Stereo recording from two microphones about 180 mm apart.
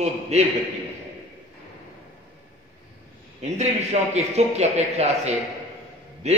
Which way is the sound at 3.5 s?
40° right (ahead or behind).